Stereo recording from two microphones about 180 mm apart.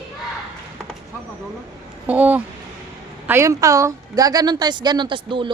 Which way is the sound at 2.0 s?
10° right (ahead or behind).